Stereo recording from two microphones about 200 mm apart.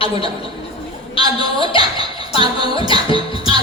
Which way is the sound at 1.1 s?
25° left (ahead or behind).